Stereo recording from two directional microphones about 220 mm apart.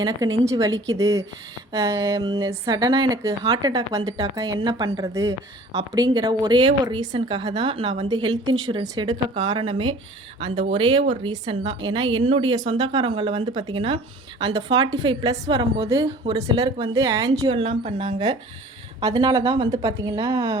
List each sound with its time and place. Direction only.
0.4 s speech: 15° right (ahead or behind)